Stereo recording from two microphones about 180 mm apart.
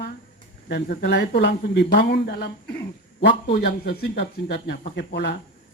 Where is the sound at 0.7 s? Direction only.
65° left (ahead or behind).